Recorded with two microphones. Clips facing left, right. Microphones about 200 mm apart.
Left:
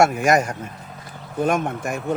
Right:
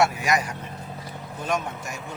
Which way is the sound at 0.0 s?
50° left (ahead or behind).